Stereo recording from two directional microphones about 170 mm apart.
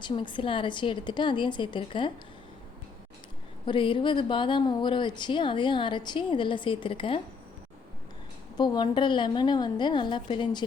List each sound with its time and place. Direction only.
0.0 s a woman's voice: 30° left (ahead or behind)
3.7 s a woman's voice: 30° left (ahead or behind)
8.5 s a woman's voice: 25° left (ahead or behind)